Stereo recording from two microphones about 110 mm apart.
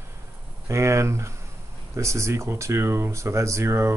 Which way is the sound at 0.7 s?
25° right (ahead or behind).